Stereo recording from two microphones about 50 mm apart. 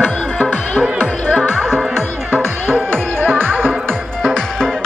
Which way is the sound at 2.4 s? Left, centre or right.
Right.